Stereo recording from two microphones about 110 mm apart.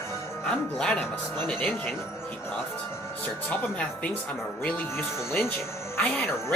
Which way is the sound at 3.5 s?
10° left (ahead or behind).